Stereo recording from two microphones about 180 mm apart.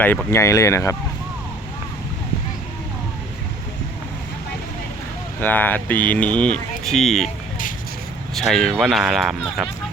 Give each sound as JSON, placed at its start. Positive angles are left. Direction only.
{"t": 0.0, "sound": "speech", "side_deg": 10}
{"t": 5.4, "sound": "speech", "side_deg": 10}
{"t": 8.4, "sound": "speech", "side_deg": 0}